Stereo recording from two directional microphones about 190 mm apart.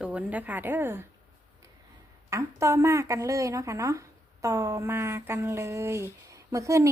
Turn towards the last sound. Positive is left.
turn(degrees=-15)  # may be behind; listen again after turning